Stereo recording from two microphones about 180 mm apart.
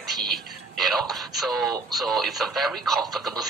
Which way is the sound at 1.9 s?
Centre (ahead or behind).